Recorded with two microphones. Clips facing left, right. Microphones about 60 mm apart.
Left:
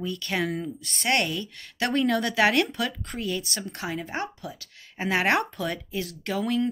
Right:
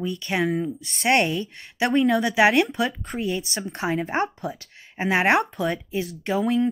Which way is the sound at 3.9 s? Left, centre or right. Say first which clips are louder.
Right 7 dB; right.